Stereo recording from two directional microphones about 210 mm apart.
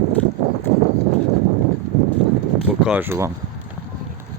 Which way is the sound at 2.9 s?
10° right (ahead or behind).